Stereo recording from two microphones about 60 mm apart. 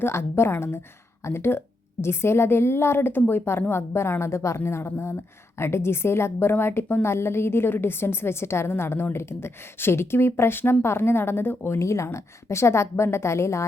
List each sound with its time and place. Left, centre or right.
0.0 s speech: left